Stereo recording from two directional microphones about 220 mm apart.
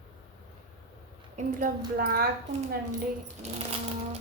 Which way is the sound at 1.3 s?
40° right (ahead or behind).